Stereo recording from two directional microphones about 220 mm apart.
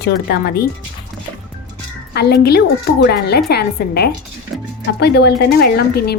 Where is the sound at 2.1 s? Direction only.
45° left (ahead or behind).